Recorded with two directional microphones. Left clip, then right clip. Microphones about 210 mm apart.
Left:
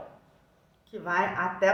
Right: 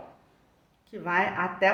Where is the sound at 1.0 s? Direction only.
40° right (ahead or behind).